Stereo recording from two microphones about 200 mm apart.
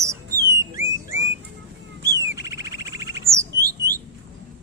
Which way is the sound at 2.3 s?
15° right (ahead or behind).